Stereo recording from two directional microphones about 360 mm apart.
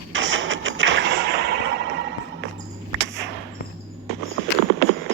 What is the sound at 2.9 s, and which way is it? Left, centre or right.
Whip, right.